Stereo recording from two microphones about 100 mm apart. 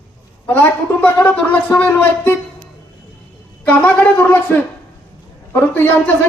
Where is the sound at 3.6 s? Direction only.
15° left (ahead or behind).